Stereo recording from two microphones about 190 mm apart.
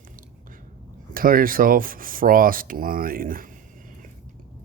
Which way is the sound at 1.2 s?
50° right (ahead or behind).